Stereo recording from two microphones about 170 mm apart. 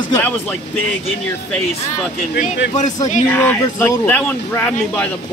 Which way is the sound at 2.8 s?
45° left (ahead or behind).